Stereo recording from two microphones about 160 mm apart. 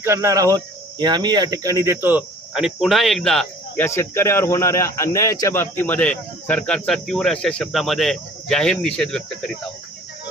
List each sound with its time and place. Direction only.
0.0 s cricket: 15° right (ahead or behind)
2.5 s speech: centre (ahead or behind)
3.8 s speech: 15° left (ahead or behind)